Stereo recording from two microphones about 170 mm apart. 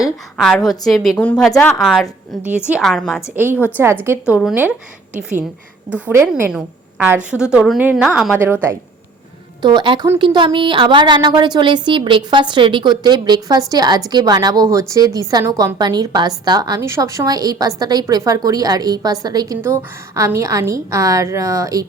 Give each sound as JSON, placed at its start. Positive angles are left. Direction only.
{"t": 0.0, "sound": "a woman's voice", "side_deg": 0}
{"t": 3.3, "sound": "a woman's voice", "side_deg": -10}
{"t": 5.9, "sound": "a woman's voice", "side_deg": -15}
{"t": 9.6, "sound": "a woman's voice", "side_deg": -25}